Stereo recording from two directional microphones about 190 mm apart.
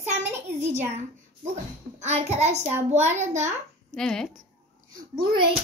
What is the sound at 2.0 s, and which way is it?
A child's voice, 35° right (ahead or behind).